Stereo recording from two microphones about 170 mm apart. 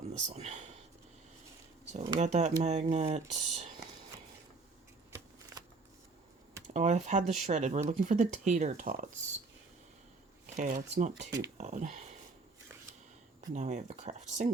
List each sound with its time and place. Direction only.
0.1 s speech: 40° right (ahead or behind)
1.9 s speech: 40° right (ahead or behind)
6.7 s speech: 40° right (ahead or behind)
10.6 s speech: 45° right (ahead or behind)
13.5 s speech: 45° right (ahead or behind)